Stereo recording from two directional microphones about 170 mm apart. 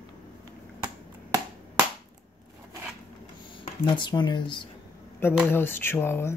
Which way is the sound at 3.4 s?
30° left (ahead or behind).